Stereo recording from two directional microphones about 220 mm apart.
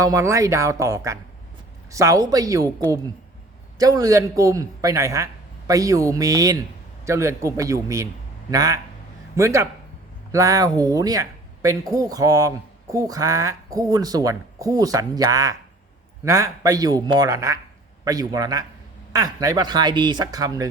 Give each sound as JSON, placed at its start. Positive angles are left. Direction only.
{"t": 0.0, "sound": "speech", "side_deg": -15}
{"t": 3.8, "sound": "a man's voice", "side_deg": -15}